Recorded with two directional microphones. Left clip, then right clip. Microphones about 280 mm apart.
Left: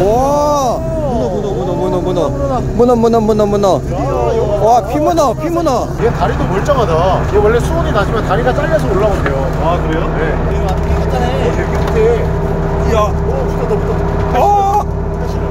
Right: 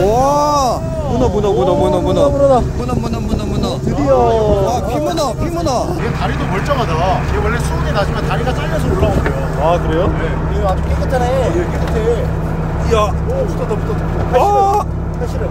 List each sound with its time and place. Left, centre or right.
0.1 s groan: centre
1.9 s speech: centre
2.9 s speech: centre
6.0 s speech: left
14.4 s speech: centre